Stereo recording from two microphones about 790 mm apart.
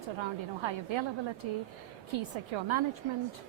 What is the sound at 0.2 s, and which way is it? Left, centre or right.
Speech, right.